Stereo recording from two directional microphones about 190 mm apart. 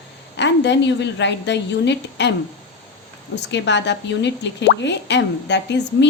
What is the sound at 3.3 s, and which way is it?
Speech, 65° left (ahead or behind).